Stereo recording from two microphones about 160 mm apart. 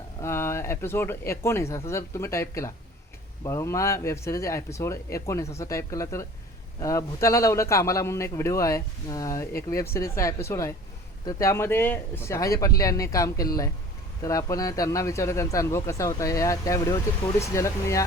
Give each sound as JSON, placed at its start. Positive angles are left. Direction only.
{"t": 0.2, "sound": "a man's voice", "side_deg": 15}